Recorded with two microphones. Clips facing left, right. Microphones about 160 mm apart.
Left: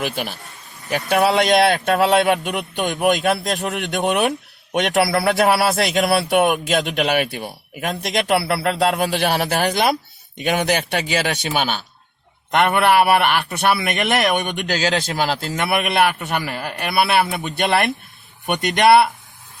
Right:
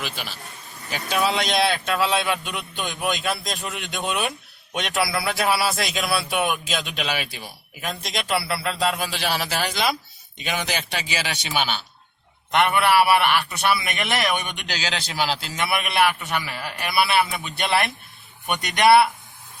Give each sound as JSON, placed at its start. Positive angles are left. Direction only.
{"t": 0.0, "sound": "a man's voice", "side_deg": 45}
{"t": 0.9, "sound": "a man's voice", "side_deg": 65}
{"t": 2.3, "sound": "a man's voice", "side_deg": 50}